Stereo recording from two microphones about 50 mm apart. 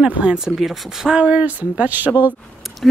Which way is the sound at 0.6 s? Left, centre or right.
Centre.